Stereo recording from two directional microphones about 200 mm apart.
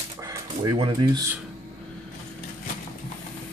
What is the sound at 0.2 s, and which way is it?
Speech, 20° right (ahead or behind).